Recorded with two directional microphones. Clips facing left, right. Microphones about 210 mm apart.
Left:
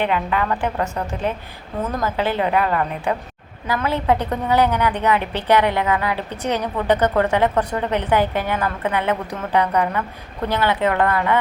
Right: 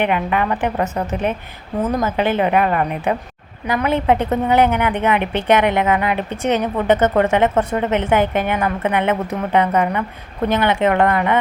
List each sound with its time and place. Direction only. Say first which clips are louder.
0.0 s a woman's voice: right 2 dB; 20° right (ahead or behind)